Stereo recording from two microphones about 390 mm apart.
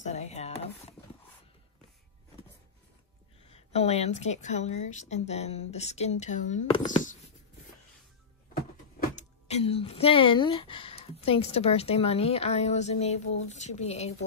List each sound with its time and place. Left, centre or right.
0.0 s speech: centre
3.4 s speech: centre
9.1 s speech: centre